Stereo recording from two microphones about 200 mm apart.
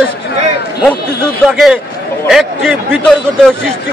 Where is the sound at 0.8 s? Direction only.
5° left (ahead or behind).